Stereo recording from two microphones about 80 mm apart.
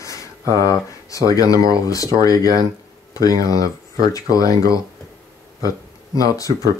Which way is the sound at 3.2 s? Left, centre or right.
Left.